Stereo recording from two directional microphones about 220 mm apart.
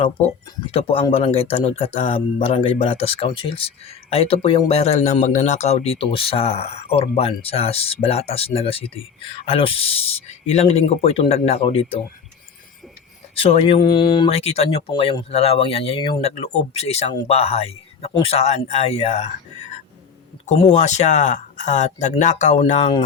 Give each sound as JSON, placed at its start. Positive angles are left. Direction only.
{"t": 0.7, "sound": "speech", "side_deg": 25}
{"t": 13.4, "sound": "speech", "side_deg": 25}